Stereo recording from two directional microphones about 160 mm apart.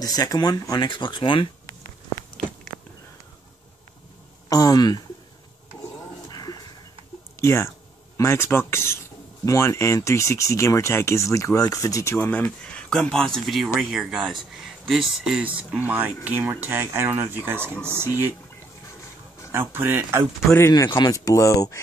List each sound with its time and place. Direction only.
0.0 s speech: 25° left (ahead or behind)
4.5 s speech: 20° left (ahead or behind)
6.2 s a sound: 25° left (ahead or behind)
7.3 s speech: 15° left (ahead or behind); by 18.1 s 15° right (ahead or behind)
19.5 s speech: 15° right (ahead or behind)
20.5 s speech: 20° left (ahead or behind)